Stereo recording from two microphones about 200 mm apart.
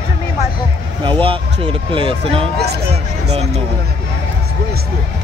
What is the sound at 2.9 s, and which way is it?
Speech, 30° right (ahead or behind).